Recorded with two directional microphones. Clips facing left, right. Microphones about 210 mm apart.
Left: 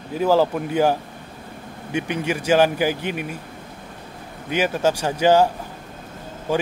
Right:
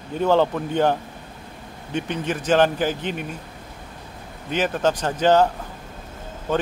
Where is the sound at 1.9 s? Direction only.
10° left (ahead or behind).